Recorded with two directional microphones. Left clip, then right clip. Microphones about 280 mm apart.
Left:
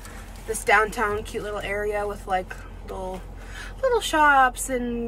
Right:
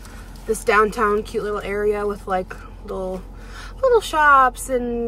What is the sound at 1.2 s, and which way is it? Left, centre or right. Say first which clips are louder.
Speech: right 5 dB; centre.